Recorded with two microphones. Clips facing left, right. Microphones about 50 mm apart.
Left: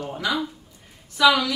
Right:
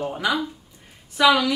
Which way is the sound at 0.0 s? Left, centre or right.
Centre.